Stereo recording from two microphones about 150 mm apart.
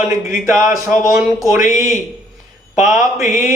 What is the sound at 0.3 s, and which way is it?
Speech, 20° right (ahead or behind).